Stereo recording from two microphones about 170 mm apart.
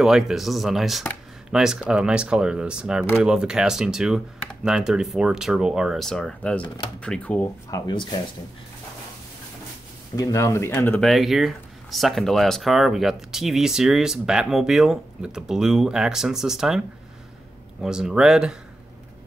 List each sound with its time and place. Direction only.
0.0 s speech: centre (ahead or behind)
7.7 s speech: 25° left (ahead or behind)
10.1 s speech: 20° left (ahead or behind)
11.1 s speech: centre (ahead or behind)
17.8 s speech: 5° right (ahead or behind)